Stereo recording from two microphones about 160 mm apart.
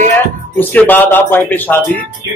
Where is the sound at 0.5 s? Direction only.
10° left (ahead or behind).